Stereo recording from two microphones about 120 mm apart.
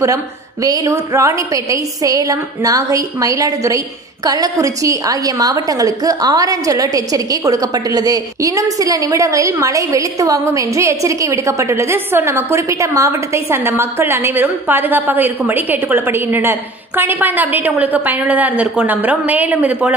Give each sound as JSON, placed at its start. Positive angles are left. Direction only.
{"t": 0.7, "sound": "a woman's voice", "side_deg": -25}